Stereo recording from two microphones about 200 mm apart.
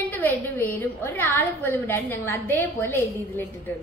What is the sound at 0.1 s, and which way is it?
A woman's voice, 10° left (ahead or behind).